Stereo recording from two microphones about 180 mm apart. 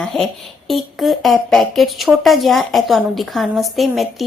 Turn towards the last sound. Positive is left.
turn(degrees=0)  # may be behind; listen again after turning